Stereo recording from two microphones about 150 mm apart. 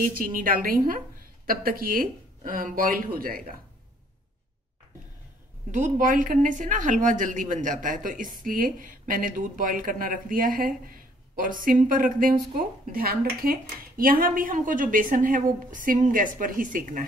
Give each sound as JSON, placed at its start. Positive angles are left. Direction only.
{"t": 0.0, "sound": "a woman's voice", "side_deg": -65}
{"t": 5.7, "sound": "speech", "side_deg": -60}